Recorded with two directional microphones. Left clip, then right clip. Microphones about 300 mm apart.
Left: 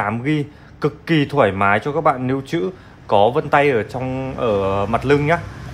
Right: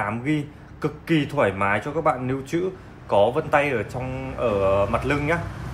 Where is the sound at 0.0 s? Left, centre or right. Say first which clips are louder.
Left 5 dB; left.